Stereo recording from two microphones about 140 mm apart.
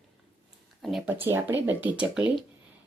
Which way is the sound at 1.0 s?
15° right (ahead or behind).